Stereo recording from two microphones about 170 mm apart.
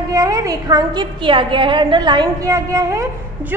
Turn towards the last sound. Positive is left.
turn(degrees=-15)  # may be behind; listen again after turning